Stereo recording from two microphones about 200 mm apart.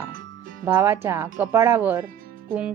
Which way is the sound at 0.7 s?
10° right (ahead or behind).